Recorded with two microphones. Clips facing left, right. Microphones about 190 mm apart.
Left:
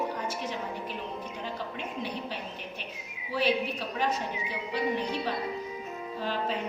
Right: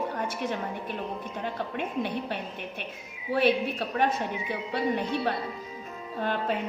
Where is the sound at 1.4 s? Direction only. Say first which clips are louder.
Right 7 dB; 60° right (ahead or behind).